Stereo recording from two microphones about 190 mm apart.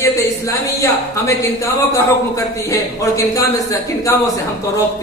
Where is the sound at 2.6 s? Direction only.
15° left (ahead or behind).